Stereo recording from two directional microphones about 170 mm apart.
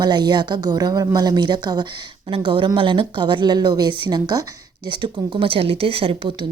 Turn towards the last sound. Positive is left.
turn(degrees=-35)  # may be behind; listen again after turning